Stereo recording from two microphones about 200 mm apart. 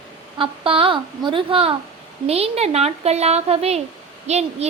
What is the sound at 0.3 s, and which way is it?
A woman's voice, 25° right (ahead or behind).